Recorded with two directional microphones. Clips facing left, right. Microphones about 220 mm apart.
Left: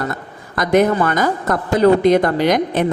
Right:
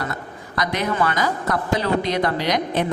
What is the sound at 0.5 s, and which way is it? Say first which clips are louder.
A woman's voice: left 9 dB; 50° left (ahead or behind).